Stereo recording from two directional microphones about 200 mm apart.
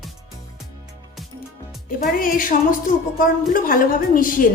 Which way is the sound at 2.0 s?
45° left (ahead or behind).